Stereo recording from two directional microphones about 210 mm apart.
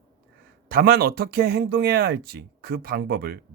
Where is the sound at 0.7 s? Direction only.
45° right (ahead or behind).